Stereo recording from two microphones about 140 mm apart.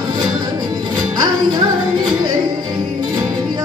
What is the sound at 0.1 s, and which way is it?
Music, 30° right (ahead or behind).